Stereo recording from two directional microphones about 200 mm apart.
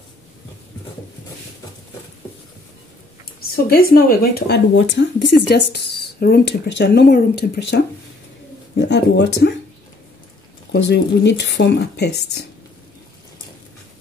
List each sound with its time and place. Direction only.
3.3 s speech: 50° left (ahead or behind)
10.7 s speech: 60° left (ahead or behind)